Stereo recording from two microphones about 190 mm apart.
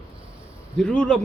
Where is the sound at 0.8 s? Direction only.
5° left (ahead or behind).